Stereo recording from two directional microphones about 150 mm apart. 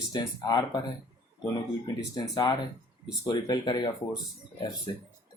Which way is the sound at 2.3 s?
25° left (ahead or behind).